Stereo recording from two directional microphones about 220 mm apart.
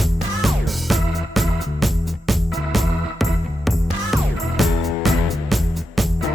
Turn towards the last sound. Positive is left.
turn(degrees=0)  # may be behind; listen again after turning